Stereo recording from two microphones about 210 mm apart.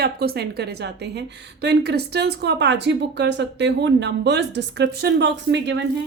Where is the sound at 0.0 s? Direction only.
50° right (ahead or behind).